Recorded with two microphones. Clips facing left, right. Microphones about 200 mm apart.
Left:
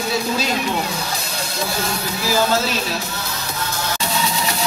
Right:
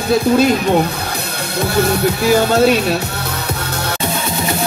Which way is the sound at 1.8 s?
65° right (ahead or behind).